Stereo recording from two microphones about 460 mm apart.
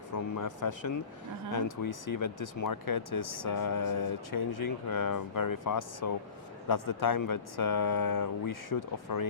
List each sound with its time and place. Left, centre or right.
0.1 s speech: left